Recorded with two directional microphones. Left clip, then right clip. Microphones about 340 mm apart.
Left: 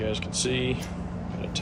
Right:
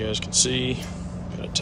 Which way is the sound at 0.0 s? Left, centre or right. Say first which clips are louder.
Right 5 dB; centre.